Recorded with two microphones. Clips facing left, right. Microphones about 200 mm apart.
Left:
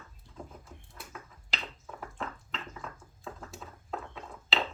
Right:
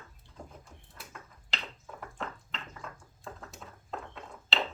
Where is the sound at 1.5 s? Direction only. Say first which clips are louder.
Left 1 dB; centre (ahead or behind).